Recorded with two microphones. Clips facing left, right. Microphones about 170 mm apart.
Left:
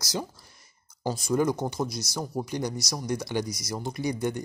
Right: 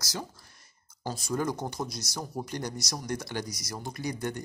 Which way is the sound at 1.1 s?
10° left (ahead or behind).